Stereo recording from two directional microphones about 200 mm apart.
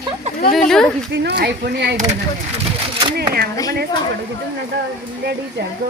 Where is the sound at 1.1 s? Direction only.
60° right (ahead or behind).